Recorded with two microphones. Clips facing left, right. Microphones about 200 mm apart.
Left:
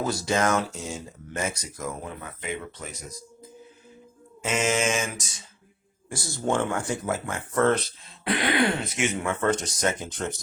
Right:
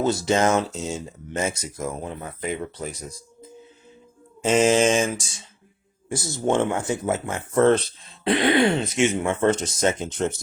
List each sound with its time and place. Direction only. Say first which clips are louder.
0.0 s speech: right 4 dB; 25° right (ahead or behind)
4.4 s mantra: right 7 dB; 30° right (ahead or behind)
6.1 s speech: right 4 dB; 20° right (ahead or behind)